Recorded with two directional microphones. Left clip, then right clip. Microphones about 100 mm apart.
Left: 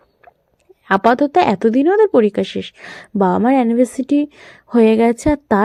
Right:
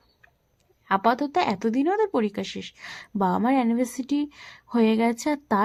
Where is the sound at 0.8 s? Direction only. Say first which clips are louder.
Left 9 dB; 40° left (ahead or behind).